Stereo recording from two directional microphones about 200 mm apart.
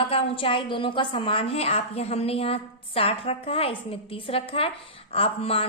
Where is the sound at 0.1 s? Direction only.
25° left (ahead or behind).